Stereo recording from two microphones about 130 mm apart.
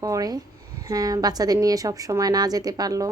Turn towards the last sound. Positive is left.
turn(degrees=-30)  # may be behind; listen again after turning